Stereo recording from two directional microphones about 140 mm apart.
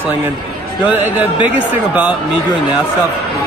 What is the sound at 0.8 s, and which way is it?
Speech, 10° right (ahead or behind).